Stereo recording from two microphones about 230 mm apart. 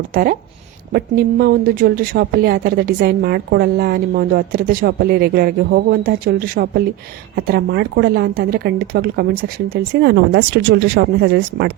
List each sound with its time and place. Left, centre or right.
0.1 s speech: right